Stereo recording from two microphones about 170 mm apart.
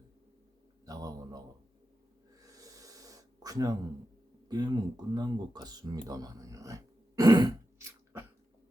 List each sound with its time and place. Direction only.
0.9 s mantra: 20° right (ahead or behind)
2.4 s gasp: 20° right (ahead or behind)
4.4 s a sound: 25° right (ahead or behind)